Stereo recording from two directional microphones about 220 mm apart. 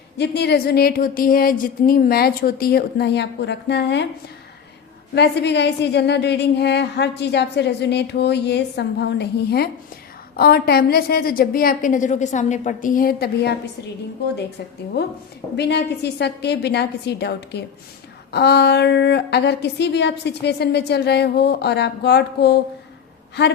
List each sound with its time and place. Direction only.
0.2 s a woman's voice: 50° left (ahead or behind)
5.1 s a woman's voice: 50° left (ahead or behind)
15.0 s a woman's voice: 45° left (ahead or behind)